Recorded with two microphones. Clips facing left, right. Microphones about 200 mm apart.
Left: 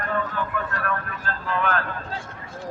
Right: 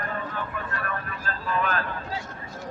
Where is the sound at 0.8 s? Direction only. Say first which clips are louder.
Left 4 dB; 70° left (ahead or behind).